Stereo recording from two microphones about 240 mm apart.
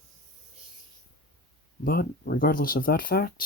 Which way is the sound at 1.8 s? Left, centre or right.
Left.